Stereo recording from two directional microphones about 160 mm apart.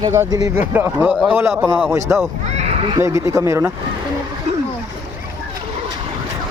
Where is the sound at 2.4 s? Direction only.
45° right (ahead or behind).